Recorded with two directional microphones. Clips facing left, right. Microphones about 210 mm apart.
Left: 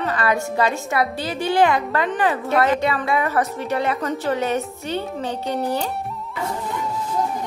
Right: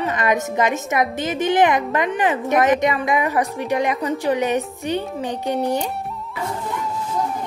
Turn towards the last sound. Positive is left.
turn(degrees=-15)  # may be behind; listen again after turning